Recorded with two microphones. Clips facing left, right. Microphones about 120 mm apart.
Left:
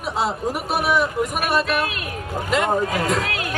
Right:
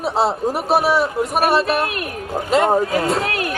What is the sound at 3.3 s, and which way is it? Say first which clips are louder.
Speech: right 4 dB; 50° right (ahead or behind).